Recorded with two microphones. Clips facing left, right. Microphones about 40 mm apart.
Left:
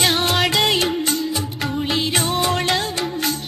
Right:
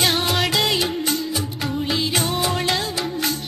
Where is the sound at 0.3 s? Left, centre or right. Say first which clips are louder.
Left 2 dB; centre.